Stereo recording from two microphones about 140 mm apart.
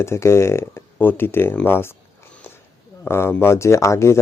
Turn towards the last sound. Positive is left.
turn(degrees=20)  # may be behind; listen again after turning